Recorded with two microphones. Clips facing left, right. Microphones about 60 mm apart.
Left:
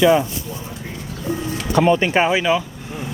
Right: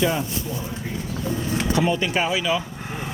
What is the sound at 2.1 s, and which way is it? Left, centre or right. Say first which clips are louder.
Speech: left 6 dB; left.